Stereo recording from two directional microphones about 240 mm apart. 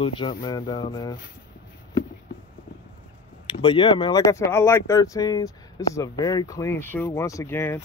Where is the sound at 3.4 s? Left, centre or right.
Left.